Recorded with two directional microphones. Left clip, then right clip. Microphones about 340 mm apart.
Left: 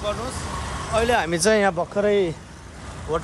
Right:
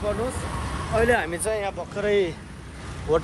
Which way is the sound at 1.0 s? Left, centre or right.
Centre.